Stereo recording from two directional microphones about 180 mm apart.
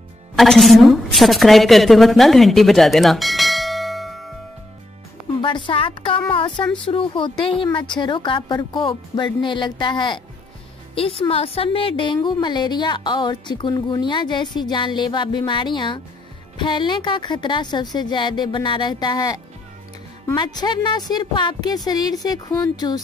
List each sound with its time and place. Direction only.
0.4 s a woman's voice: centre (ahead or behind)
5.4 s a woman's voice: 30° left (ahead or behind)